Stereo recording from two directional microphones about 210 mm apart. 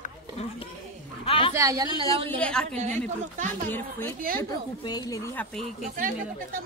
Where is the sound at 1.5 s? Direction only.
15° right (ahead or behind).